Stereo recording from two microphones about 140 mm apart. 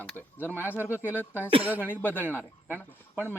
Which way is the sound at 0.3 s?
15° left (ahead or behind).